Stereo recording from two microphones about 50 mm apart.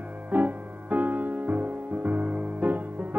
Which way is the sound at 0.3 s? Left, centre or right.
Right.